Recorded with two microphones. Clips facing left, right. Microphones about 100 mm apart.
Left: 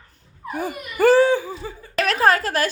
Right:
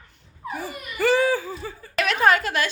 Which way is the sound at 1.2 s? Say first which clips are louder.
Left 4 dB; 20° left (ahead or behind).